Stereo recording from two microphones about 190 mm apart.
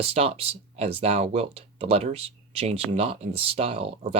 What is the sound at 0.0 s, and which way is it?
Speech, 30° right (ahead or behind).